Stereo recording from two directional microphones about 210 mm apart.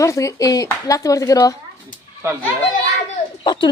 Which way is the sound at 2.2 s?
10° right (ahead or behind).